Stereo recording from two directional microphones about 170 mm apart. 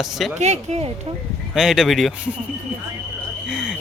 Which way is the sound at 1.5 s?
Centre (ahead or behind).